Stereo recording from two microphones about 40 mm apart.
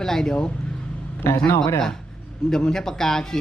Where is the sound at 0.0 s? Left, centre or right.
Centre.